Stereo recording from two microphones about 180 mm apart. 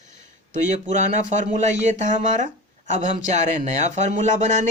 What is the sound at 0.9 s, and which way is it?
Speech, 45° right (ahead or behind).